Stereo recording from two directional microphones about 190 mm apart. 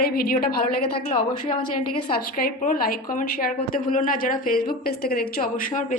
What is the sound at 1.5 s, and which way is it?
Speech, 25° left (ahead or behind).